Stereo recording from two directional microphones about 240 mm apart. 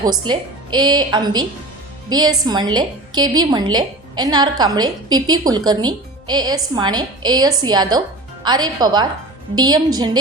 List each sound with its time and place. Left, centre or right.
0.0 s a woman's voice: centre